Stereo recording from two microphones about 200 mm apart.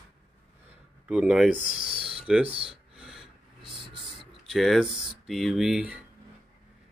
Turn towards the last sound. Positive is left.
turn(degrees=-5)  # may be behind; listen again after turning